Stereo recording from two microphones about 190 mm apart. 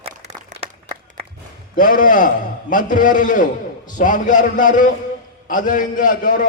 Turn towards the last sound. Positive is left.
turn(degrees=45)  # may be behind; listen again after turning